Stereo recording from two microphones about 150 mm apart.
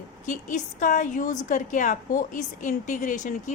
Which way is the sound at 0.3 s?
60° left (ahead or behind).